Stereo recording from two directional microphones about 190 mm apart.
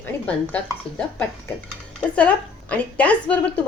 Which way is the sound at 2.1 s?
5° left (ahead or behind).